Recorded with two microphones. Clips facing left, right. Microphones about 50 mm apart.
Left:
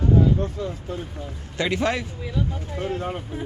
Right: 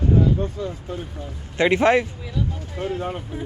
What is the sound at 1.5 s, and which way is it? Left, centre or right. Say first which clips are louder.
Speech: right 7 dB; right.